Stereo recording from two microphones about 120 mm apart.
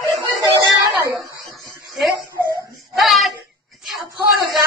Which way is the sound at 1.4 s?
Centre (ahead or behind).